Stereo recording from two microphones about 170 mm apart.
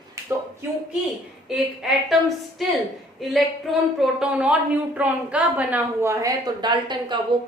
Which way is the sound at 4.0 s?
5° right (ahead or behind).